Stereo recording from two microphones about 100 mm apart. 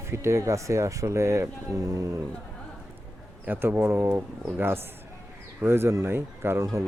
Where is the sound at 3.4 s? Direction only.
20° right (ahead or behind).